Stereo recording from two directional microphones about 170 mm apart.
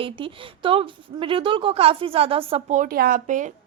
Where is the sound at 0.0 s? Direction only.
30° right (ahead or behind).